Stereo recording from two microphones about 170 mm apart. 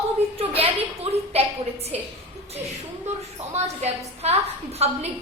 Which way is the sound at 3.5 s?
40° right (ahead or behind).